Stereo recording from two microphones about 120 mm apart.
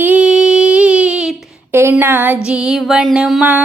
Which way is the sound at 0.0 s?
10° right (ahead or behind).